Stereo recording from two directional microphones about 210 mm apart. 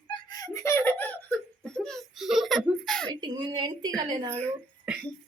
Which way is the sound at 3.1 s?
20° right (ahead or behind).